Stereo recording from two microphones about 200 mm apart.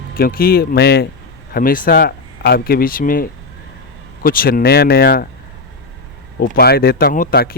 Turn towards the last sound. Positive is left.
turn(degrees=45)  # may be behind; listen again after turning